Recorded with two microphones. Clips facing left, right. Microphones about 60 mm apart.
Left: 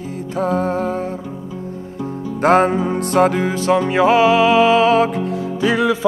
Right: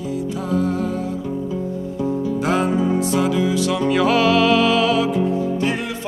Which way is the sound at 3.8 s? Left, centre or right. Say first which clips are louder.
Left 2 dB; left.